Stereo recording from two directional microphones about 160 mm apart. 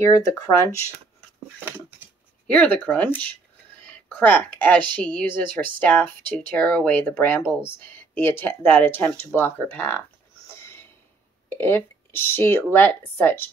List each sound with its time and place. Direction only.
0.0 s speech: 15° left (ahead or behind)
2.4 s speech: 10° left (ahead or behind)
10.5 s a sound: 15° left (ahead or behind)
11.4 s speech: 15° left (ahead or behind)